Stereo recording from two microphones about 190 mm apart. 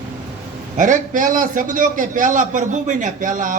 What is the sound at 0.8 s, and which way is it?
A man's voice, 40° right (ahead or behind).